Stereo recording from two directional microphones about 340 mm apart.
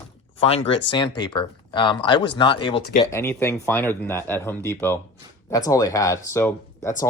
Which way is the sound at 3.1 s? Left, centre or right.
Centre.